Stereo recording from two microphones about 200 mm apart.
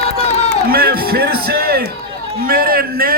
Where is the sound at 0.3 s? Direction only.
30° left (ahead or behind).